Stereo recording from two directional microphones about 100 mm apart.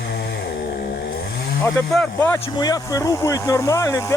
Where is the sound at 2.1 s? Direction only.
25° left (ahead or behind).